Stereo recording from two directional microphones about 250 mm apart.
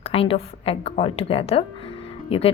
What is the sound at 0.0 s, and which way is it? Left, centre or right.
Speech, left.